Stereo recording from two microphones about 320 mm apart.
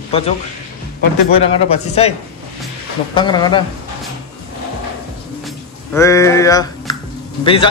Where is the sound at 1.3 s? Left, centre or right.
Centre.